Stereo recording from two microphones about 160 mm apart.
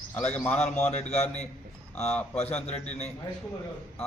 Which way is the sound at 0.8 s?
45° left (ahead or behind).